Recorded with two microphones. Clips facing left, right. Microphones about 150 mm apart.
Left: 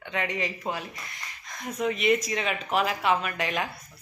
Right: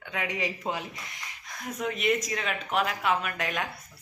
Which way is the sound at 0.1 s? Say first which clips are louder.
Left 2 dB; 10° right (ahead or behind).